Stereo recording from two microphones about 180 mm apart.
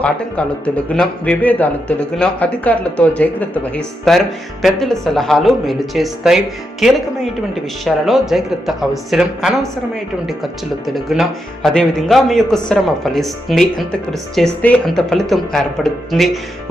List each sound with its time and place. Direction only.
0.0 s speech: 5° left (ahead or behind)